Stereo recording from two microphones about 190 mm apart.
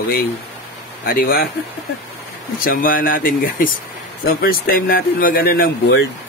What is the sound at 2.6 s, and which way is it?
Speech, 50° left (ahead or behind).